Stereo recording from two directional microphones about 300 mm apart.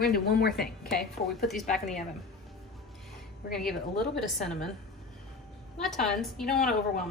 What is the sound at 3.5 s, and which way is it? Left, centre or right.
A woman's voice, centre.